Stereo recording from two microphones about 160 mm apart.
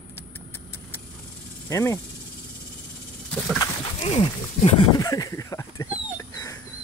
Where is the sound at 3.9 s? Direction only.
35° left (ahead or behind).